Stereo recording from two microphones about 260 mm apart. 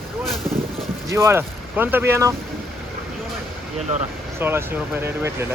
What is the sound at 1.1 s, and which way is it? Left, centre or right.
Speech, centre.